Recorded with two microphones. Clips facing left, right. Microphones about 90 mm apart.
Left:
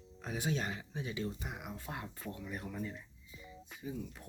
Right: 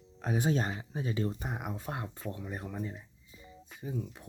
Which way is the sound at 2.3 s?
30° right (ahead or behind).